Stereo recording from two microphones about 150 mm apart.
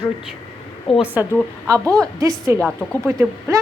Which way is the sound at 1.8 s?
5° left (ahead or behind).